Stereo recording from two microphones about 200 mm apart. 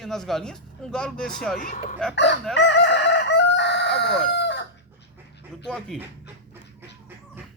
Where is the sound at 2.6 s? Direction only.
60° left (ahead or behind).